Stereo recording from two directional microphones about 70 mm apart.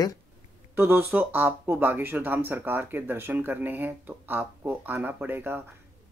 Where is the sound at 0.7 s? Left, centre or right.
Right.